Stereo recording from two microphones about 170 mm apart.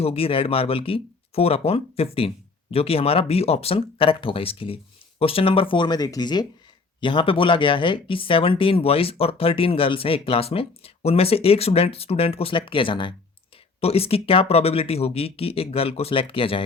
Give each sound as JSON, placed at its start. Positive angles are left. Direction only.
{"t": 0.0, "sound": "speech", "side_deg": 35}